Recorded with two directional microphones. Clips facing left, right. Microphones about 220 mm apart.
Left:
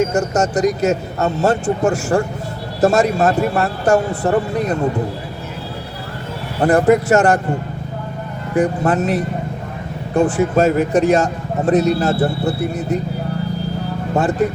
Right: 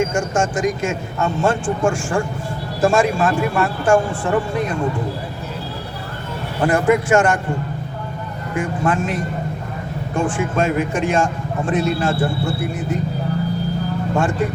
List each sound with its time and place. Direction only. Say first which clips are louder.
0.0 s speech: left 3 dB; 40° left (ahead or behind)
6.6 s speech: left 3 dB; 40° left (ahead or behind)
8.5 s speech: left 5 dB; 40° left (ahead or behind)
14.2 s speech: left 3 dB; 40° left (ahead or behind)